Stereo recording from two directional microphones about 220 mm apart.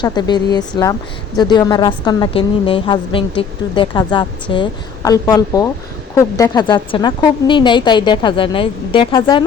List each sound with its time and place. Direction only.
0.0 s a woman's voice: 20° left (ahead or behind)